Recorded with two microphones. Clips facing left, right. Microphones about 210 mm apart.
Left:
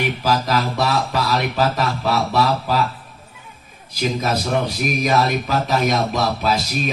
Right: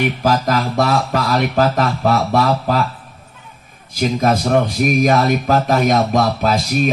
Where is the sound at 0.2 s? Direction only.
50° right (ahead or behind).